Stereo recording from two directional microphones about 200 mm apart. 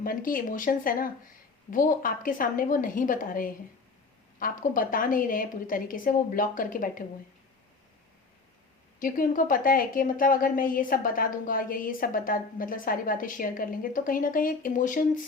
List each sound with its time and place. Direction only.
0.0 s a woman's voice: 45° left (ahead or behind)
9.0 s a woman's voice: 45° left (ahead or behind)